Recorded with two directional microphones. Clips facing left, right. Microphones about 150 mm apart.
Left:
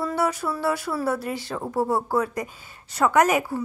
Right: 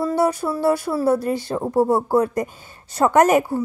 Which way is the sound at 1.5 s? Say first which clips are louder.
Right 6 dB; 25° right (ahead or behind).